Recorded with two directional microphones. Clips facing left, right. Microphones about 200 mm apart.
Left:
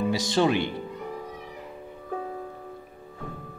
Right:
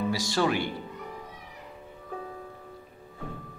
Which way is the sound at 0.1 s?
20° left (ahead or behind).